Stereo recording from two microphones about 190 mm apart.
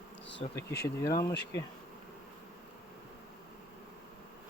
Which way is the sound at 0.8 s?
15° left (ahead or behind).